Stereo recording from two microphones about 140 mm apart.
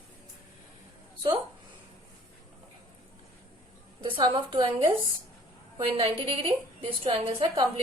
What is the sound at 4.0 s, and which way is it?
Speech, 35° right (ahead or behind).